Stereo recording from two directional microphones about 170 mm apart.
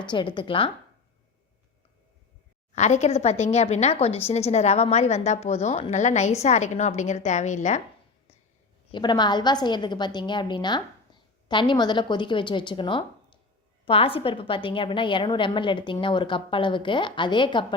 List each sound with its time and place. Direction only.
0.0 s a woman's voice: 25° left (ahead or behind)
2.7 s a woman's voice: 45° left (ahead or behind)
8.9 s a woman's voice: 25° left (ahead or behind)